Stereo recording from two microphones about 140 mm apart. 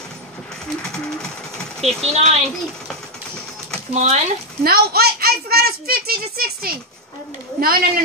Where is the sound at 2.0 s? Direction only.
50° right (ahead or behind).